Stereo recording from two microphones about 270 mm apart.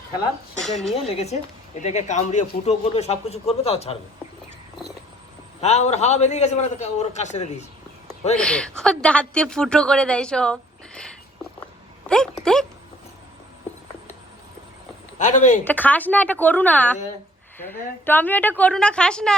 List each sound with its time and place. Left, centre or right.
0.6 s a woman's voice: centre
0.9 s a man's voice: left
5.5 s a man's voice: left
8.4 s a woman's voice: centre
15.2 s a man's voice: left
15.6 s a woman's voice: centre